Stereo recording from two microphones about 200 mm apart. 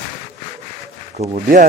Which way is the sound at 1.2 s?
40° right (ahead or behind).